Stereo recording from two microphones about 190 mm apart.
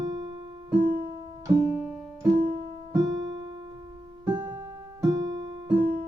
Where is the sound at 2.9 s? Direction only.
20° right (ahead or behind).